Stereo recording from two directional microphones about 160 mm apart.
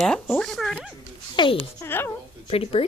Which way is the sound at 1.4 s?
35° left (ahead or behind).